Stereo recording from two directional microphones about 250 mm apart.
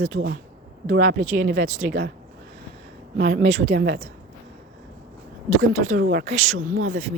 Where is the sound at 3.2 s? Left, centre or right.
Right.